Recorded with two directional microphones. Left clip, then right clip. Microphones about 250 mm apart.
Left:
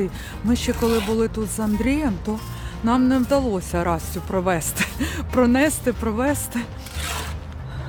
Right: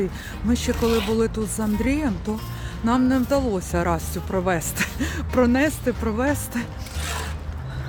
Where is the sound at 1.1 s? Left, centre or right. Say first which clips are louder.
Even; centre.